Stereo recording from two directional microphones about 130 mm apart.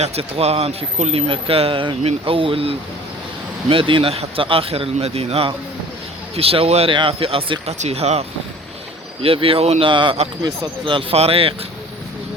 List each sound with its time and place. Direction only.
0.0 s speech: 50° right (ahead or behind)
7.8 s speech: 55° right (ahead or behind)
9.2 s speech: 45° right (ahead or behind)
9.9 s speech: 40° right (ahead or behind)